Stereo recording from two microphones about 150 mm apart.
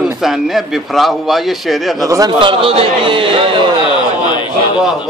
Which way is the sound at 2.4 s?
35° right (ahead or behind).